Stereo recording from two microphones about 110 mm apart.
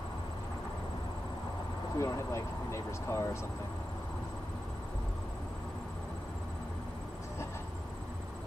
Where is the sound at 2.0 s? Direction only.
25° left (ahead or behind).